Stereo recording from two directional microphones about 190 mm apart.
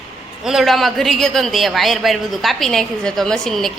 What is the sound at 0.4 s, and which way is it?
Speech, centre (ahead or behind).